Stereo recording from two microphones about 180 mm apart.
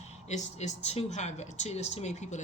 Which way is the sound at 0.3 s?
40° left (ahead or behind).